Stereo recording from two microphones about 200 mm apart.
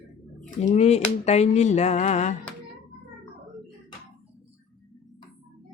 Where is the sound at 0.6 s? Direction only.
35° left (ahead or behind).